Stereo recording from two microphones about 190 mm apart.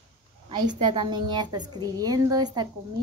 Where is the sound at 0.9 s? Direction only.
25° right (ahead or behind).